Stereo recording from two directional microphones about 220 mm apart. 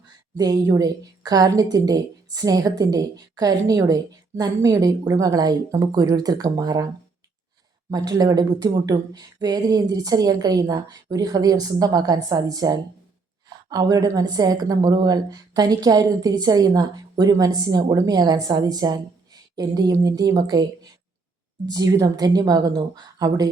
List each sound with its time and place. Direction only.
0.3 s a woman's voice: 15° right (ahead or behind)
21.7 s a woman's voice: 15° right (ahead or behind)